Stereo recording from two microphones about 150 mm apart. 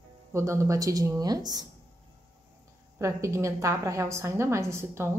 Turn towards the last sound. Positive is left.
turn(degrees=-20)  # may be behind; listen again after turning